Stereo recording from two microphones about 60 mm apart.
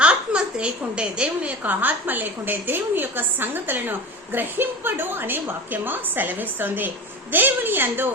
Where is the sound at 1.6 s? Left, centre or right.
Right.